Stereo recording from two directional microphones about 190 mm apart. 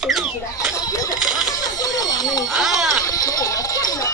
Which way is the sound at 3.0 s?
20° left (ahead or behind).